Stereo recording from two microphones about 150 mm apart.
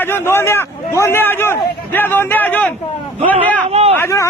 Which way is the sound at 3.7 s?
45° right (ahead or behind).